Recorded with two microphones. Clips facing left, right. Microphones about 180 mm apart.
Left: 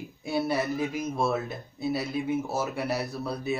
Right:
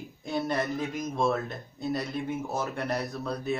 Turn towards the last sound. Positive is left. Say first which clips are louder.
# even
turn(degrees=5)  # may be behind; listen again after turning